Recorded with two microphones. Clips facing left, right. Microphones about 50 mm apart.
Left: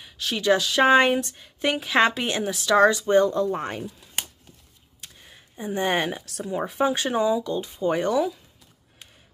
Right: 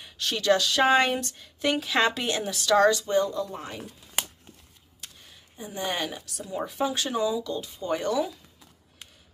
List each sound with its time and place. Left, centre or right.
0.0 s speech: centre
3.1 s speech: left
5.3 s speech: left